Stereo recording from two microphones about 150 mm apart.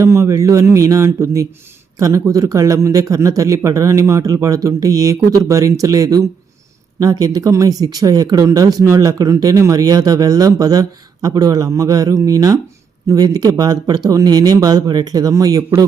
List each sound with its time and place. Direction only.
0.0 s speech: 20° right (ahead or behind)